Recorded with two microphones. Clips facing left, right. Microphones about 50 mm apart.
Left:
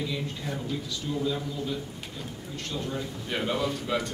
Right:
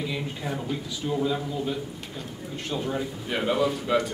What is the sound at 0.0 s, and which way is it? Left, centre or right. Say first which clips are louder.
A man's voice: right 2 dB; right.